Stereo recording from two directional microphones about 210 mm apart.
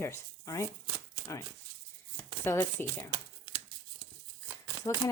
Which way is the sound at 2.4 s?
10° left (ahead or behind).